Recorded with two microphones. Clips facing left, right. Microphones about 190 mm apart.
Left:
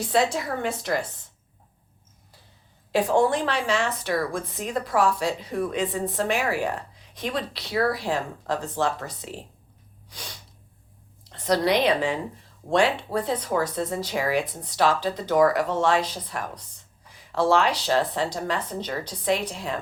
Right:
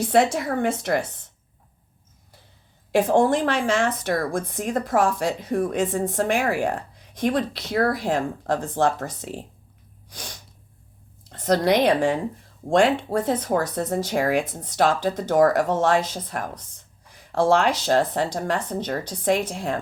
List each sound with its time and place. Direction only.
0.1 s speech: 55° right (ahead or behind)
3.0 s speech: 50° right (ahead or behind)
10.1 s sneeze: 45° right (ahead or behind)
11.2 s a woman's voice: 45° right (ahead or behind)